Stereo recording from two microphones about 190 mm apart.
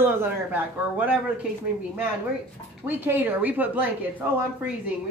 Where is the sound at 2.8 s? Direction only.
10° right (ahead or behind).